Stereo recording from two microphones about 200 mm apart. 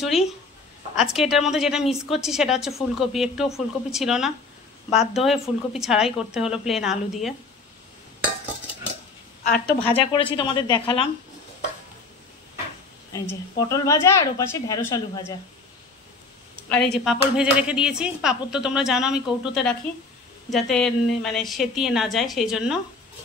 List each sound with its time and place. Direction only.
0.9 s a woman's voice: centre (ahead or behind)
9.7 s a woman's voice: 10° left (ahead or behind)
9.9 s speech: 25° left (ahead or behind)
13.1 s a woman's voice: 20° left (ahead or behind)
16.6 s a woman's voice: 5° left (ahead or behind)